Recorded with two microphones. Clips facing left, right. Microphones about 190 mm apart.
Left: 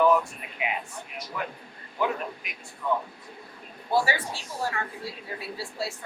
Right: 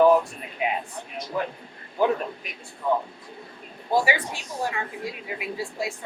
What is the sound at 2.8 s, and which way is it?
Speech, 30° right (ahead or behind).